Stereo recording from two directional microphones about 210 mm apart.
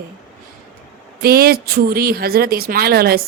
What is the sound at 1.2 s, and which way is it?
Speech, 45° right (ahead or behind).